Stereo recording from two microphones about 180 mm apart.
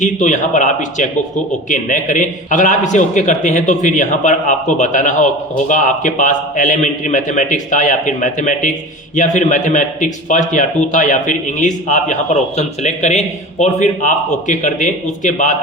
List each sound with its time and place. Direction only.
0.0 s a man's voice: 45° left (ahead or behind)